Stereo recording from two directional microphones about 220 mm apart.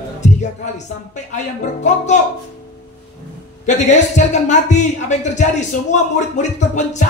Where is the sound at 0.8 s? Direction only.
35° left (ahead or behind).